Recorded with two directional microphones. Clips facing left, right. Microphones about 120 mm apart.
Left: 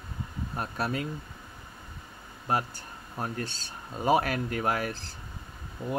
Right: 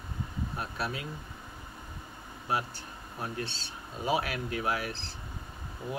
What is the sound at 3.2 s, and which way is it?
Speech, 45° left (ahead or behind).